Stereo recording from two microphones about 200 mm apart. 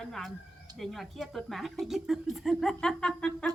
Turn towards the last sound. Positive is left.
turn(degrees=5)  # may be behind; listen again after turning